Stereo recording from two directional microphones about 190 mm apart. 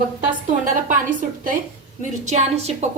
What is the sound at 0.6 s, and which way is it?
A woman's voice, 45° right (ahead or behind).